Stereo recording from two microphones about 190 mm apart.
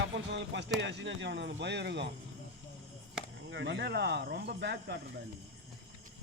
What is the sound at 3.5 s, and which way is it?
Speech, 70° right (ahead or behind).